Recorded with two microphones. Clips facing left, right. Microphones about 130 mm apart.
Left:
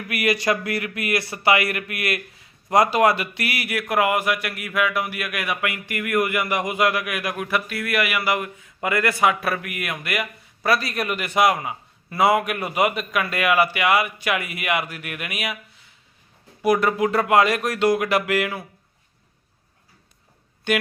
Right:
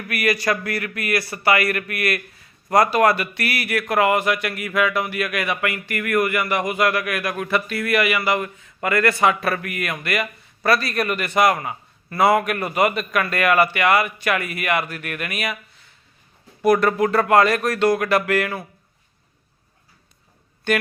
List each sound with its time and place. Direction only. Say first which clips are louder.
0.1 s a man's voice: even; 20° left (ahead or behind)
20.7 s a man's voice: right 1 dB; 15° left (ahead or behind)